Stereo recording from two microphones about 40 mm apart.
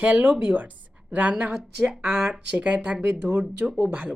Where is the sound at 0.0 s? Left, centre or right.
Right.